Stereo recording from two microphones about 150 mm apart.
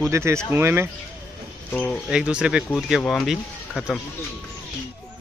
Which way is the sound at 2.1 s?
5° right (ahead or behind).